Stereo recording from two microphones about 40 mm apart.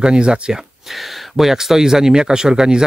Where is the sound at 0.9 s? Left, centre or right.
Centre.